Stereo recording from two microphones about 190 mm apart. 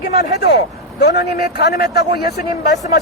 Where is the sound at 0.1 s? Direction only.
55° left (ahead or behind).